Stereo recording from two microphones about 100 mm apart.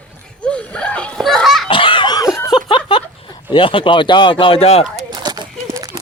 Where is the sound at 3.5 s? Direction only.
60° left (ahead or behind); by 4.8 s 85° left.